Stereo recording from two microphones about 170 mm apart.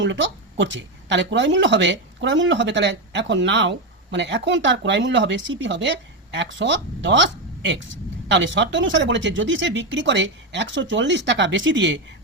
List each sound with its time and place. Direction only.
0.0 s speech: 90° right